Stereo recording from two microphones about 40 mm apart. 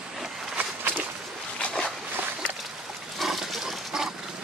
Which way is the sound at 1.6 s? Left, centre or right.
Left.